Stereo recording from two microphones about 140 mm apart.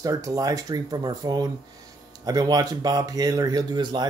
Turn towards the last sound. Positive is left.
turn(degrees=-35)  # may be behind; listen again after turning